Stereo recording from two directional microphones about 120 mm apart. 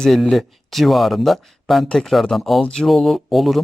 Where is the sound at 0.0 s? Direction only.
Centre (ahead or behind).